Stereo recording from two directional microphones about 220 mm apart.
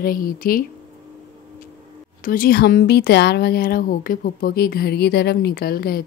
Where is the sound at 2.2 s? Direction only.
40° left (ahead or behind).